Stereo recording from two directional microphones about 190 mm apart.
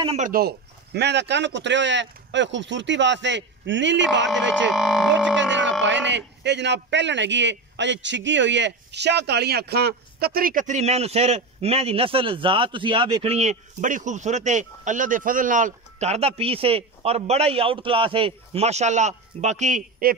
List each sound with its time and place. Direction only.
0.0 s speech: 35° right (ahead or behind)
0.3 s a man's voice: 55° right (ahead or behind); by 4.3 s 70° right (ahead or behind)
4.3 s speech: centre (ahead or behind)
5.4 s speech: 70° right (ahead or behind); by 20.2 s 45° right (ahead or behind)